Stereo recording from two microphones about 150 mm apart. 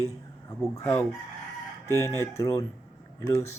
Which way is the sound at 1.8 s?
20° left (ahead or behind).